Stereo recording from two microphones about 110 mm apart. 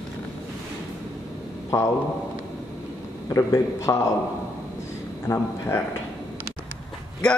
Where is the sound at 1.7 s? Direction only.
30° left (ahead or behind).